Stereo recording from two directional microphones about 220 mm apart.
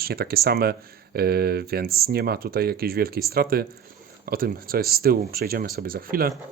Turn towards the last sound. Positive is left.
turn(degrees=-40)  # may be behind; listen again after turning